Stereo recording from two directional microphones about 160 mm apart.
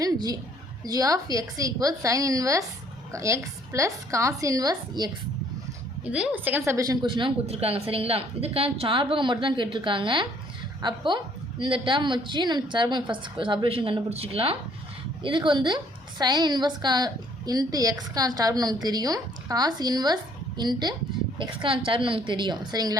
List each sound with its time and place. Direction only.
0.0 s a sound: 25° right (ahead or behind)
0.9 s a woman's voice: 20° right (ahead or behind)
6.1 s a woman's voice: 10° right (ahead or behind); by 23.0 s 25° right (ahead or behind)